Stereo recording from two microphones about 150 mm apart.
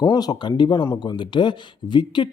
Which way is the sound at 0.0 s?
25° left (ahead or behind).